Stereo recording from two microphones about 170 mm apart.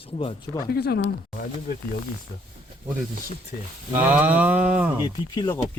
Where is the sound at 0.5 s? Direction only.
70° left (ahead or behind).